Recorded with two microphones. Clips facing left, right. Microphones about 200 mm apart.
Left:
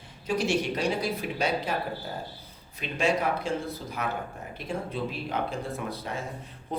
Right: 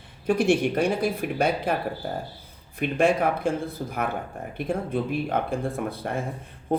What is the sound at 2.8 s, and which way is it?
Speech, 55° right (ahead or behind).